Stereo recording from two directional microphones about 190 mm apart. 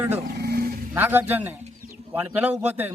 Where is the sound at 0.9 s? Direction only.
10° right (ahead or behind).